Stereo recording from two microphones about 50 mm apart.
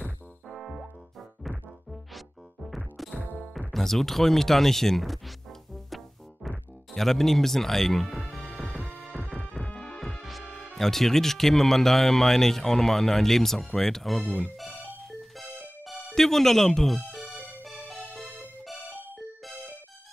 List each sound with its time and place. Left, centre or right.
0.5 s music: centre
10.7 s speech: centre
14.6 s music: centre
16.2 s speech: centre
17.2 s music: right
17.6 s music: centre
18.9 s music: right